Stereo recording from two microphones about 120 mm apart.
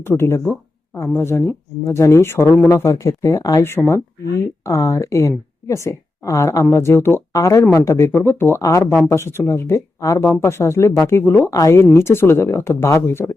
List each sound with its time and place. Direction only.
0.0 s a woman's voice: 20° left (ahead or behind)